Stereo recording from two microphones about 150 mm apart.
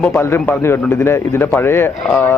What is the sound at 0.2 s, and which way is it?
Speech, 15° left (ahead or behind).